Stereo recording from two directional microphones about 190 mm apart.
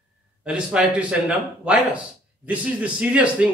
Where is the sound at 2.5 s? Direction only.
5° right (ahead or behind).